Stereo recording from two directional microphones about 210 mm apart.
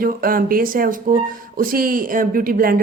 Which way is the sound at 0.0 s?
45° right (ahead or behind).